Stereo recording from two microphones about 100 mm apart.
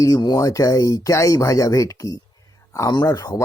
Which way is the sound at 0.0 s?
40° left (ahead or behind).